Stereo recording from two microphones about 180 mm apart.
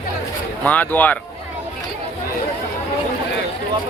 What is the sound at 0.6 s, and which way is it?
Speech, 10° left (ahead or behind).